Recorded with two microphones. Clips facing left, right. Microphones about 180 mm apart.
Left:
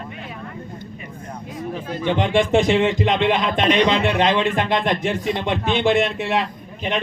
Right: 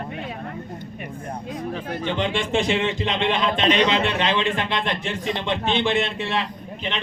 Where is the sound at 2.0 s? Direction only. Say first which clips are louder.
Left 7 dB; 50° left (ahead or behind).